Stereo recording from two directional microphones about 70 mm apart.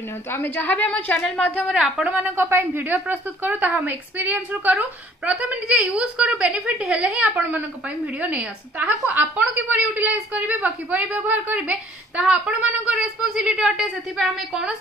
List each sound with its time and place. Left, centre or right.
0.3 s a woman's voice: left
1.7 s a woman's voice: centre
2.1 s a woman's voice: right; by 14.8 s centre